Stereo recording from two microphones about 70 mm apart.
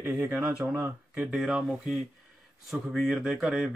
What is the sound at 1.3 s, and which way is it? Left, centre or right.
Speech, centre.